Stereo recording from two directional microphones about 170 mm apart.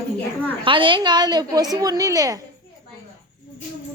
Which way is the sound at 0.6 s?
30° right (ahead or behind).